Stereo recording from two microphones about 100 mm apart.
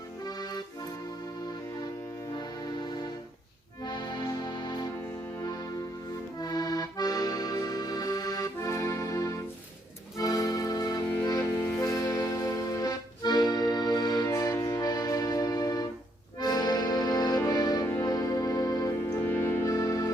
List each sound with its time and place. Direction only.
0.3 s accordion: 40° left (ahead or behind)
2.3 s music: 45° left (ahead or behind)
6.4 s accordion: 40° left (ahead or behind)
10.2 s music: 35° left (ahead or behind)
14.3 s music: 35° left (ahead or behind)
16.4 s accordion: 40° left (ahead or behind)
17.5 s music: 40° left (ahead or behind); by 19.5 s 20° left (ahead or behind)
19.6 s music: 35° left (ahead or behind)